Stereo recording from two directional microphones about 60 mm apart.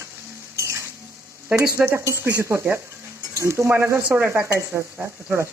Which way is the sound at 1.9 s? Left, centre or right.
Right.